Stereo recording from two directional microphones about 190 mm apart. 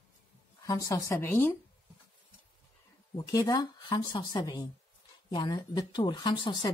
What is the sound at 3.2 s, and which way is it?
Speech, 20° left (ahead or behind).